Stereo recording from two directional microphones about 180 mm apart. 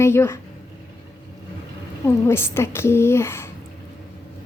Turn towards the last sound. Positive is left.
turn(degrees=15)  # may be behind; listen again after turning